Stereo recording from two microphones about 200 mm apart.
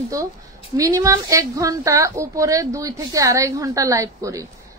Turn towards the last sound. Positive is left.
turn(degrees=-15)  # may be behind; listen again after turning